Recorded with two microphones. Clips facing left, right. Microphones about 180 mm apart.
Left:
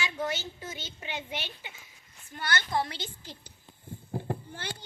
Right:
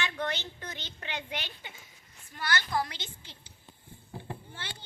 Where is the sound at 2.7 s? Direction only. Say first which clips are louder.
Left 1 dB; 30° left (ahead or behind).